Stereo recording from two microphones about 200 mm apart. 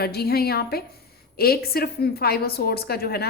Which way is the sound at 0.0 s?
50° left (ahead or behind).